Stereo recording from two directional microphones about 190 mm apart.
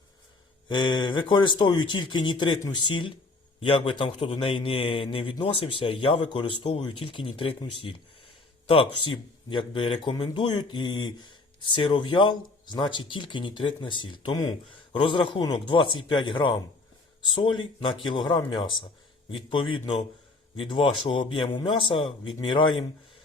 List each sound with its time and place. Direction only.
0.7 s speech: 25° left (ahead or behind)